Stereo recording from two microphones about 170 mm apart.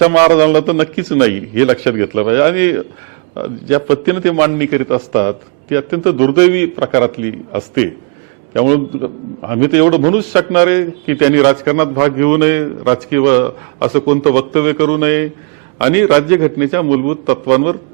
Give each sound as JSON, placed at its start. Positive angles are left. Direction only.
{"t": 0.0, "sound": "a man's voice", "side_deg": -15}
{"t": 9.0, "sound": "a man's voice", "side_deg": -30}
{"t": 9.6, "sound": "a man's voice", "side_deg": -15}